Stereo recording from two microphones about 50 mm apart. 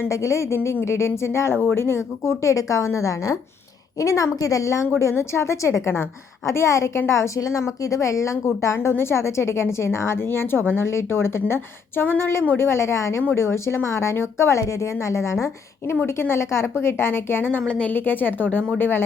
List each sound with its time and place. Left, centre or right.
0.1 s a woman's voice: left
4.9 s speech: left
7.1 s a woman's voice: left
12.0 s a woman's voice: left
16.0 s a woman's voice: left
17.7 s a woman's voice: left
17.9 s a woman's voice: left